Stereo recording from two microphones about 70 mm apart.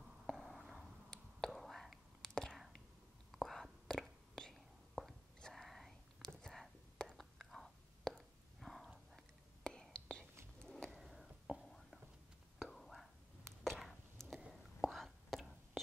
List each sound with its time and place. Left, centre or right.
0.3 s whispering: centre
0.6 s a sound: centre
1.1 s whispering: centre
2.5 s whispering: centre
9.6 s whispering: centre
13.7 s a sound: centre
14.5 s whispering: centre